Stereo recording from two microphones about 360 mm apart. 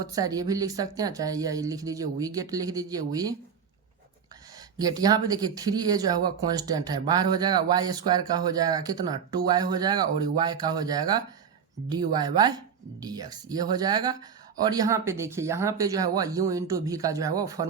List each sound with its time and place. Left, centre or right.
0.0 s speech: centre
4.8 s speech: centre